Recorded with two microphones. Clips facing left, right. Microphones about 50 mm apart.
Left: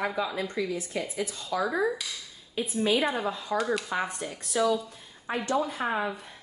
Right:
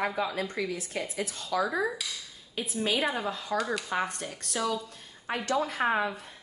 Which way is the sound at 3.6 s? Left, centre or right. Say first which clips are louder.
Left 2 dB; centre.